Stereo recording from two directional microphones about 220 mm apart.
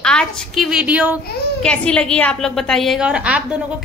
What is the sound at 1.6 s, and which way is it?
A woman's voice, 5° left (ahead or behind).